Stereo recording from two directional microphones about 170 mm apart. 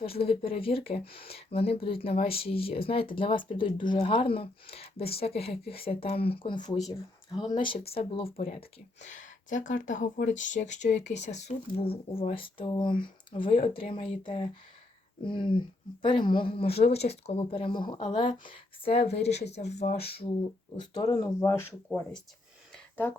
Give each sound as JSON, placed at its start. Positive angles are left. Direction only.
{"t": 0.2, "sound": "speech", "side_deg": 35}
{"t": 19.9, "sound": "speech", "side_deg": 65}
{"t": 21.0, "sound": "speech", "side_deg": 30}
{"t": 21.2, "sound": "speech", "side_deg": 15}
{"t": 22.7, "sound": "a sound", "side_deg": 10}